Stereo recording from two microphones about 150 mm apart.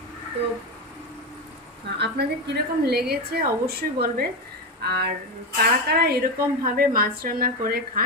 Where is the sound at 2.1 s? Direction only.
90° right.